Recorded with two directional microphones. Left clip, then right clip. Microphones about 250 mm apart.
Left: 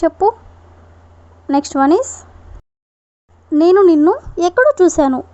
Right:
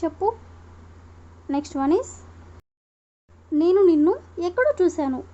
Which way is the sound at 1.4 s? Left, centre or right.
Left.